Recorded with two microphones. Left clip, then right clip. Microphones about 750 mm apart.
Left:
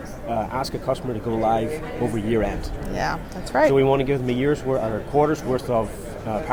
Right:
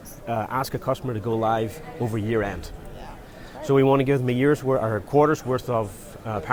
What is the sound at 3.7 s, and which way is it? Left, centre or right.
Speech, right.